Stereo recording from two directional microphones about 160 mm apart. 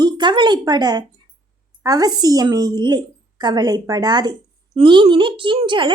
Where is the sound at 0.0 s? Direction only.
30° right (ahead or behind).